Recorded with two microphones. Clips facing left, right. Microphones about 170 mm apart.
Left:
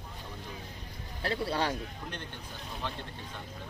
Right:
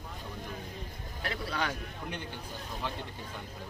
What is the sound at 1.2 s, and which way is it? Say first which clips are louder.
Speech: left 4 dB; 30° left (ahead or behind).